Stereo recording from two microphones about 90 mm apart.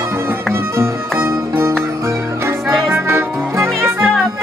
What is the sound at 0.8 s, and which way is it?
Music, 30° right (ahead or behind).